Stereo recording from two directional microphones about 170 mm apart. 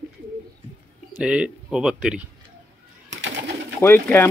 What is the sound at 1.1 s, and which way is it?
Speech, 5° right (ahead or behind).